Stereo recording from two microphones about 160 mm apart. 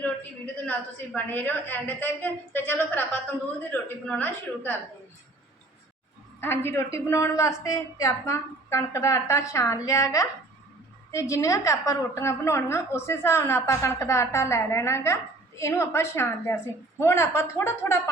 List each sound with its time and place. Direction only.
0.6 s a woman's voice: 10° left (ahead or behind)
6.4 s a woman's voice: 15° left (ahead or behind)